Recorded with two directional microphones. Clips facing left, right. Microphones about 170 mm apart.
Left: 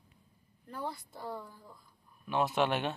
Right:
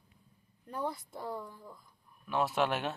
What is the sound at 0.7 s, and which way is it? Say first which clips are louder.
Speech: right 3 dB; 20° right (ahead or behind).